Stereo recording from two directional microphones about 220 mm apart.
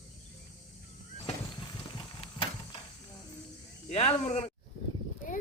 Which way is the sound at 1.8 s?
20° left (ahead or behind).